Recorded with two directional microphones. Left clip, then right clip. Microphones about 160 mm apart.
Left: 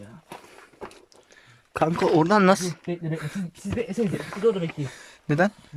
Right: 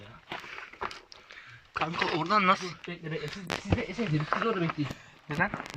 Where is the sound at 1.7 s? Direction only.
90° left.